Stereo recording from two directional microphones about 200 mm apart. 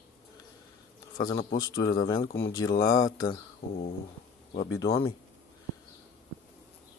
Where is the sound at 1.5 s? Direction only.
20° left (ahead or behind).